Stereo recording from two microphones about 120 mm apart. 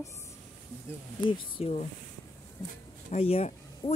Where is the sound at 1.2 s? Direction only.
55° left (ahead or behind).